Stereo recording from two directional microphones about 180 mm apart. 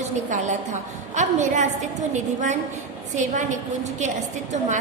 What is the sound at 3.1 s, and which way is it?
A woman's voice, 45° right (ahead or behind).